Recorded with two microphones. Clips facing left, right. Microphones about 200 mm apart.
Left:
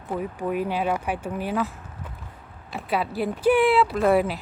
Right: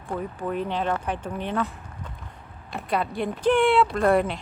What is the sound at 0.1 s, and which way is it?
Speech, 10° left (ahead or behind).